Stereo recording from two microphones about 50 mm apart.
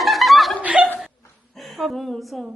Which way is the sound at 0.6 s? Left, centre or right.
Centre.